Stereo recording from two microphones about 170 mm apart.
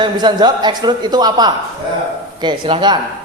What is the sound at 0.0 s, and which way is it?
A woman's voice, 25° right (ahead or behind).